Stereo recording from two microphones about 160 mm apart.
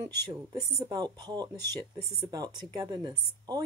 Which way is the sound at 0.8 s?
25° right (ahead or behind).